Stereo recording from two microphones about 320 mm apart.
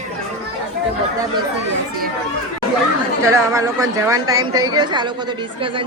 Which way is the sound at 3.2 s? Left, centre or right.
Centre.